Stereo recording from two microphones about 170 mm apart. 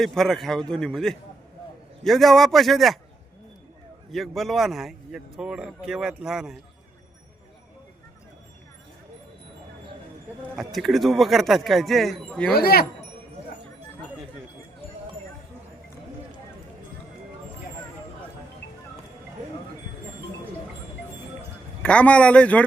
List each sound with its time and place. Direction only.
0.0 s a man's voice: centre (ahead or behind)
4.1 s a man's voice: centre (ahead or behind)
10.5 s a man's voice: centre (ahead or behind)
12.5 s speech: 65° left (ahead or behind)
21.8 s a man's voice: 10° left (ahead or behind)